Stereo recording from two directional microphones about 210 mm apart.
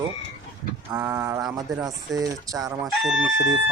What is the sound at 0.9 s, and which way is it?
Speech, 15° right (ahead or behind).